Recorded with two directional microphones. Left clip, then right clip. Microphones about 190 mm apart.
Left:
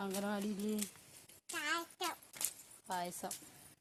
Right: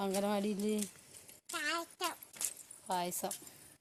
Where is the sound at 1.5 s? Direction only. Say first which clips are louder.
Right 2 dB; 10° right (ahead or behind).